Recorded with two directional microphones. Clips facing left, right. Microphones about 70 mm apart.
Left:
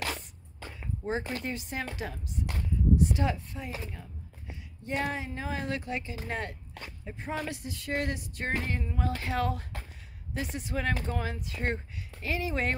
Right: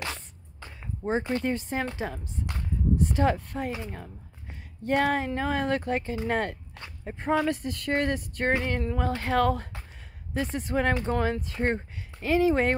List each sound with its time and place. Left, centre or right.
1.0 s speech: right
9.0 s speech: right